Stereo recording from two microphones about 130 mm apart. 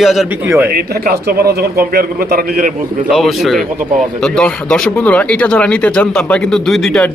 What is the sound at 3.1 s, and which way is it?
A man's voice, centre (ahead or behind).